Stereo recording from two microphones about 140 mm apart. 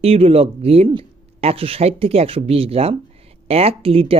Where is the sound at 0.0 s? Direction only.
45° right (ahead or behind).